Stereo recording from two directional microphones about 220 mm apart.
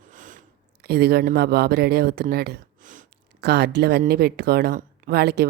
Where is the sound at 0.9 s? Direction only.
45° right (ahead or behind).